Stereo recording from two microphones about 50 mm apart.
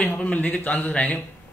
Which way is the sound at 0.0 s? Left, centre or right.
Left.